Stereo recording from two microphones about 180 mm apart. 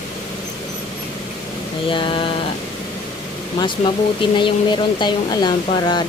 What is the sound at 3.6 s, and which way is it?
Speech, 25° left (ahead or behind).